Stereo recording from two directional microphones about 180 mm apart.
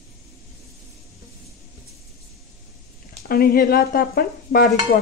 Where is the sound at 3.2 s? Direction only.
55° left (ahead or behind).